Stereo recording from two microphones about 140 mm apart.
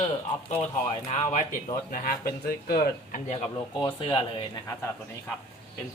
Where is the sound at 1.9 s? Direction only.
90° left.